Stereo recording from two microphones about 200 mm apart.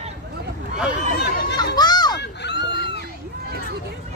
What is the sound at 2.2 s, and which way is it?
Fowl, 55° left (ahead or behind).